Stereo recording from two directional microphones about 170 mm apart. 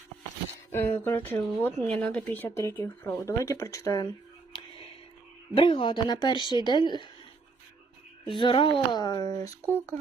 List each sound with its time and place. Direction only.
0.7 s speech: 10° left (ahead or behind)
5.5 s speech: 30° left (ahead or behind)
8.4 s speech: 30° left (ahead or behind)